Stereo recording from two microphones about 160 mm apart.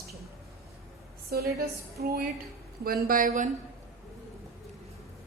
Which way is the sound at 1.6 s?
70° right (ahead or behind).